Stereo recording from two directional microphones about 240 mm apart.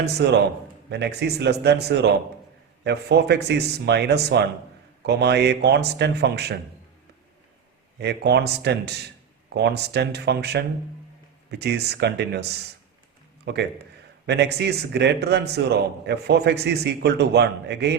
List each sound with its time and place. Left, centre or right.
0.0 s a man's voice: right
7.9 s a man's voice: right
11.6 s a man's voice: right